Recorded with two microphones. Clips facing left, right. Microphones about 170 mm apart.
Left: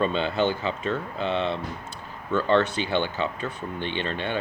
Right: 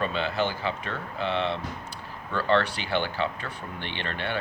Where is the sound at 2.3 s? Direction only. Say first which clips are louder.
Left 3 dB; 20° left (ahead or behind).